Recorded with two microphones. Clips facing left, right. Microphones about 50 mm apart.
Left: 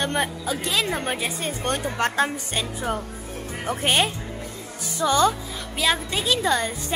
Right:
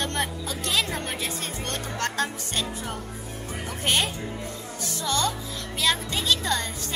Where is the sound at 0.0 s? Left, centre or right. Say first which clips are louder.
Left 4 dB; centre.